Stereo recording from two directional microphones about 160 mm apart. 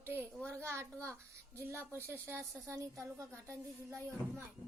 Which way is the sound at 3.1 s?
20° right (ahead or behind).